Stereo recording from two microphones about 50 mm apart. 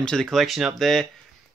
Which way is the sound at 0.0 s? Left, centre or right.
Centre.